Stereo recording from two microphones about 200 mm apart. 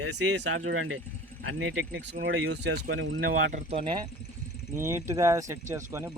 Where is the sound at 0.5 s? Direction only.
90° right.